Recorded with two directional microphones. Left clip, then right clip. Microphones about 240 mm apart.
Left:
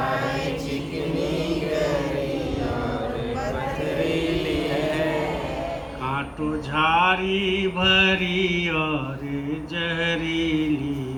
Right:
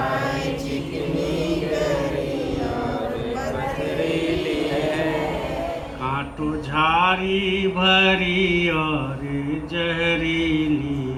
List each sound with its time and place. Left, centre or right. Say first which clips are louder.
4.0 s chant: right 2 dB; centre
6.7 s mantra: right 1 dB; left